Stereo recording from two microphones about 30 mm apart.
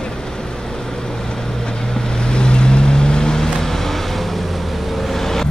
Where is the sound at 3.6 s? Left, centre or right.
Centre.